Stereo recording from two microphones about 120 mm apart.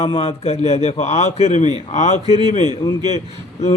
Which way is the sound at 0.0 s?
55° left (ahead or behind).